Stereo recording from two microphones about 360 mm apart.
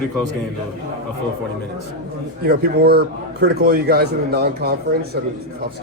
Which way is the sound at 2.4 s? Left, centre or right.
Right.